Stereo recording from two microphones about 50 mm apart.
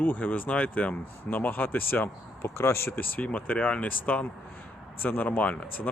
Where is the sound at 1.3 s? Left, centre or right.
Left.